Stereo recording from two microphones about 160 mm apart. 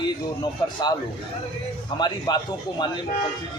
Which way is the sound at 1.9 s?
30° left (ahead or behind).